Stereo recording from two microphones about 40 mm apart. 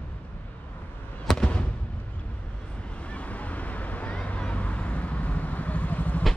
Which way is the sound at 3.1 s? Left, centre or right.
Left.